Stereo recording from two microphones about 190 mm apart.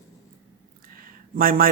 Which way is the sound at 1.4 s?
50° right (ahead or behind).